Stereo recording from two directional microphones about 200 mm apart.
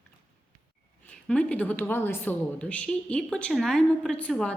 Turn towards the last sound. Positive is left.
turn(degrees=5)  # may be behind; listen again after turning